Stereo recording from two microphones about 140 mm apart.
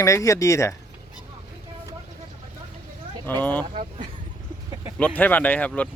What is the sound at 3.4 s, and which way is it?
Speech, 10° left (ahead or behind).